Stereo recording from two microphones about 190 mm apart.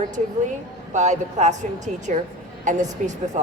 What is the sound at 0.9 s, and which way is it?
A woman's voice, 40° right (ahead or behind).